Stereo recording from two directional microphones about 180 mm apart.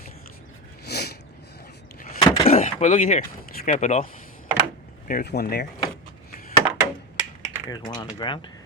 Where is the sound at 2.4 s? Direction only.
40° left (ahead or behind).